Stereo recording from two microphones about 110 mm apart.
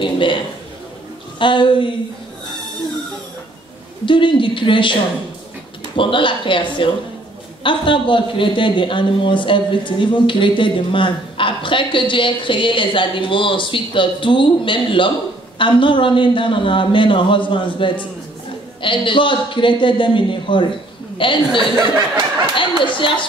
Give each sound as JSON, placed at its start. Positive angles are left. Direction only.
{"t": 0.0, "sound": "speech", "side_deg": 50}
{"t": 1.4, "sound": "speech", "side_deg": 50}
{"t": 4.0, "sound": "speech", "side_deg": 50}
{"t": 5.9, "sound": "speech", "side_deg": 50}
{"t": 22.6, "sound": "speech", "side_deg": 50}